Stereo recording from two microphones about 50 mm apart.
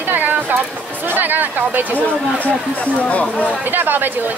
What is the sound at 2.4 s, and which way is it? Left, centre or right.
Speech, left.